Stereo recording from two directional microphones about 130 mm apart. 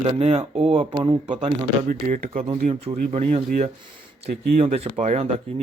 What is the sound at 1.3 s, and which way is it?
Speech, 85° right.